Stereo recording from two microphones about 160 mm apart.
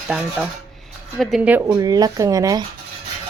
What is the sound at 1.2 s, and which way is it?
Speech, centre (ahead or behind).